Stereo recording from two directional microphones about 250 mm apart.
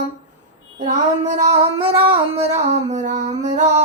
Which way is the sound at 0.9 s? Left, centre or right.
Right.